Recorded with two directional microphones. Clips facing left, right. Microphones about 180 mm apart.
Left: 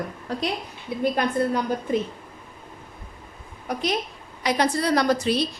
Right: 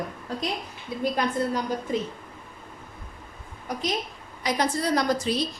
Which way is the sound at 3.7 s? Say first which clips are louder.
Left 3 dB; 65° left (ahead or behind).